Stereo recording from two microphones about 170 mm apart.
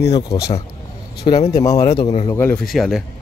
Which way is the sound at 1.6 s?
20° left (ahead or behind).